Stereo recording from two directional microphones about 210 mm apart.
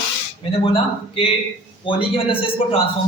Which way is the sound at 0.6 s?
25° left (ahead or behind).